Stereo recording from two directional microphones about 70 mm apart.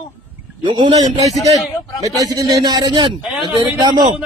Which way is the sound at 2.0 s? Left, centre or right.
Right.